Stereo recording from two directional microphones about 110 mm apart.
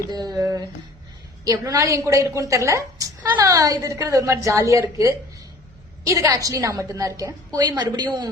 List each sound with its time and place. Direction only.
0.1 s a woman's voice: 35° right (ahead or behind)